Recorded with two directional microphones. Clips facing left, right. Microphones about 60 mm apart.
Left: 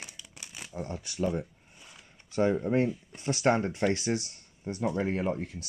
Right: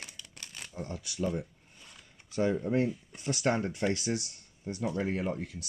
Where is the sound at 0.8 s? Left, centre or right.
Left.